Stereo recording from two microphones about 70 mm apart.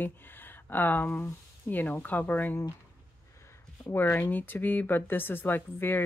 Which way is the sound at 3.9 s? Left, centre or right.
Left.